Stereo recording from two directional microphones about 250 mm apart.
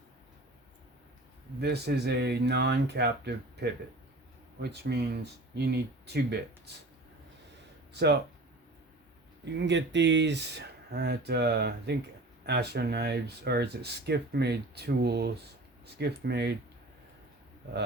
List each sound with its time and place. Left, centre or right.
1.6 s speech: right
4.7 s speech: right
7.9 s speech: right
9.4 s speech: right